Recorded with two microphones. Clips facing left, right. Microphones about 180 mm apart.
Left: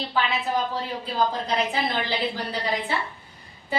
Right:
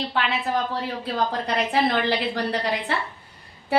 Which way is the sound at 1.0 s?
70° right (ahead or behind).